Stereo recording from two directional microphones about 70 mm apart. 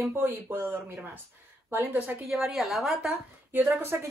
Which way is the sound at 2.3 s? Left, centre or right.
Centre.